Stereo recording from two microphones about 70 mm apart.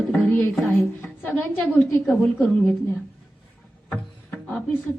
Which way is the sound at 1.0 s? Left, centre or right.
Left.